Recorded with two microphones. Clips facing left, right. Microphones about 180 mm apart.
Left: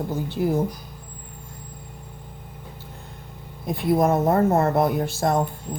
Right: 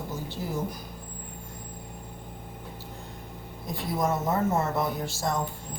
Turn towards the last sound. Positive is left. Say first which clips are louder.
# left 7 dB
turn(degrees=55)  # may be behind; listen again after turning